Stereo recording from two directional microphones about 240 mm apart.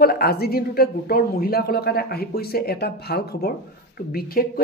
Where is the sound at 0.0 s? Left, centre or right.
Left.